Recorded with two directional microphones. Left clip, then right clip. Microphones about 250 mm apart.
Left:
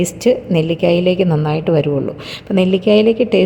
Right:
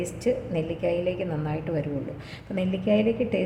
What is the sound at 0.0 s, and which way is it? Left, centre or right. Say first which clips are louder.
A woman's voice: left 12 dB; left.